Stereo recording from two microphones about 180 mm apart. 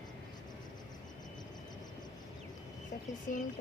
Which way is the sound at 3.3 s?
45° left (ahead or behind).